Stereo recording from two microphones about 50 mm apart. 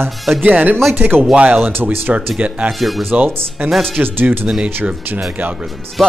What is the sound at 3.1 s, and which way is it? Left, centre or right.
Speech, right.